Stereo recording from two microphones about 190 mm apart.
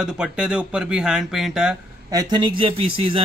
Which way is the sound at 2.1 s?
20° right (ahead or behind).